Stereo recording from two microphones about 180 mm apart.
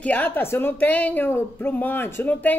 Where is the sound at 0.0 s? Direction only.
10° left (ahead or behind).